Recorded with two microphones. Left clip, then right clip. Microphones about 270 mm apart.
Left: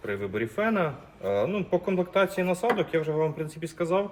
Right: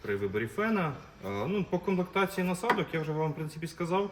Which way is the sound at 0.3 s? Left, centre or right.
Centre.